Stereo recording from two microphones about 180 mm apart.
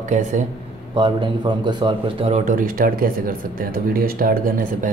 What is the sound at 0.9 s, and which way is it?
A man's voice, 25° right (ahead or behind).